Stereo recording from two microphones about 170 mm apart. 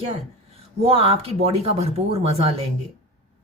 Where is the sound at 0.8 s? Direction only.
35° right (ahead or behind).